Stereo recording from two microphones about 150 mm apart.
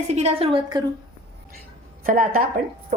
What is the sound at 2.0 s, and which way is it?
Speech, 70° right (ahead or behind).